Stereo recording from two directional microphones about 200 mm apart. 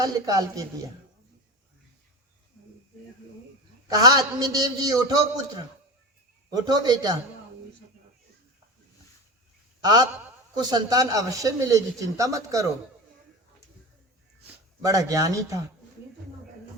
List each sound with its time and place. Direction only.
0.0 s speech: 15° right (ahead or behind)
3.8 s a man's voice: 20° right (ahead or behind)
6.5 s a man's voice: 20° right (ahead or behind)
9.8 s a man's voice: 20° right (ahead or behind)
14.4 s a man's voice: 15° right (ahead or behind)